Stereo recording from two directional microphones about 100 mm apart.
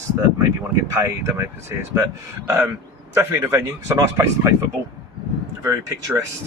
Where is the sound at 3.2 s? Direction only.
25° right (ahead or behind).